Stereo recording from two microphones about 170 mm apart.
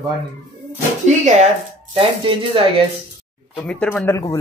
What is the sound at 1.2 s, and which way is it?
Speech, 40° right (ahead or behind).